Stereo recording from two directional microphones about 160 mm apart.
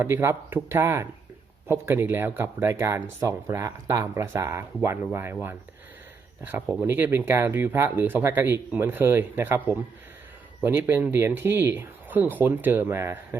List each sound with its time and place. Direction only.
0.0 s speech: 15° right (ahead or behind)
6.8 s speech: 15° right (ahead or behind)